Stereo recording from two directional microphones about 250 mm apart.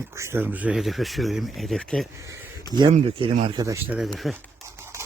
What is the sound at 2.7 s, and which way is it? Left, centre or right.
Speech, right.